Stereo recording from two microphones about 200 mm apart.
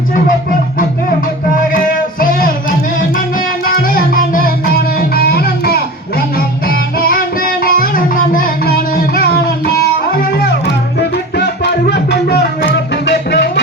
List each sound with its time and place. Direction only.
3.8 s music: 45° left (ahead or behind)